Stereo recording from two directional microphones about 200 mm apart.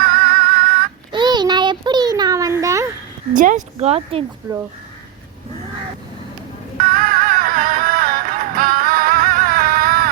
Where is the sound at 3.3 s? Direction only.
40° right (ahead or behind).